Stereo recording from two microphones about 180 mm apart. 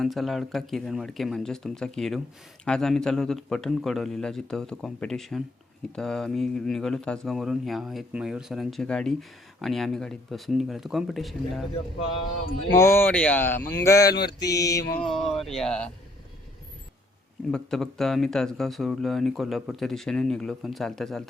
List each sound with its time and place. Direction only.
0.0 s speech: centre (ahead or behind)
12.7 s speech: 15° left (ahead or behind)
14.3 s mantra: 20° left (ahead or behind)
15.1 s speech: centre (ahead or behind)
17.5 s speech: centre (ahead or behind)